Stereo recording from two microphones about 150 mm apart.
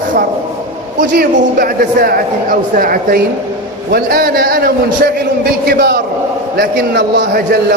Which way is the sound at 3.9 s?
90° right.